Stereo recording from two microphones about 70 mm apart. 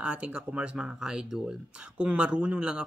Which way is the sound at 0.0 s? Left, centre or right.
Centre.